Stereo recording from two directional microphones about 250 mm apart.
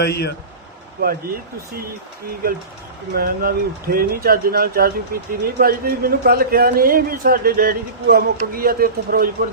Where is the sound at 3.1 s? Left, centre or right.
Right.